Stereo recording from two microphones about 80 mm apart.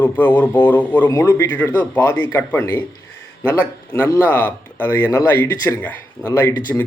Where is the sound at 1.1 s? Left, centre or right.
Left.